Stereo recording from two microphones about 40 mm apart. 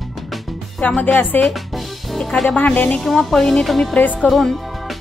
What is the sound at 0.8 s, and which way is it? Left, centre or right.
Speech, left.